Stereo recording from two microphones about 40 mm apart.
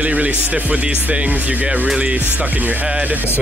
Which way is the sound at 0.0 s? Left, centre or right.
Right.